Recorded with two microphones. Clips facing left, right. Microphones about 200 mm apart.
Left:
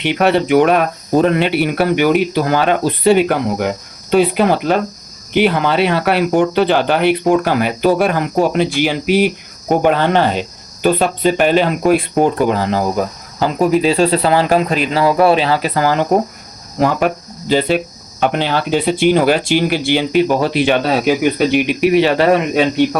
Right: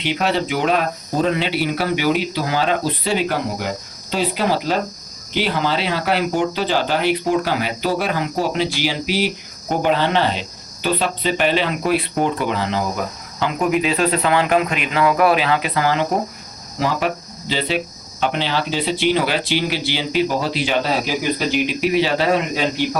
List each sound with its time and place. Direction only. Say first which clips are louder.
0.0 s speech: left 6 dB; 60° left (ahead or behind); by 16.0 s 45° left (ahead or behind)
17.5 s speech: left 7 dB; 50° left (ahead or behind)